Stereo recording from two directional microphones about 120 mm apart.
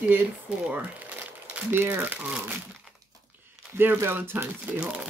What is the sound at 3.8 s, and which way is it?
Speech, 15° right (ahead or behind).